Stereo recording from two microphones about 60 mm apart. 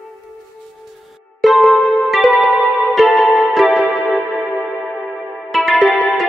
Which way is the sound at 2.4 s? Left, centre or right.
Right.